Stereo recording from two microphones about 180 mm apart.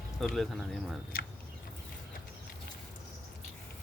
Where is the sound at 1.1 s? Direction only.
55° left (ahead or behind).